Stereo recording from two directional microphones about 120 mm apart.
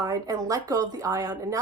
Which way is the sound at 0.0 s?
30° right (ahead or behind).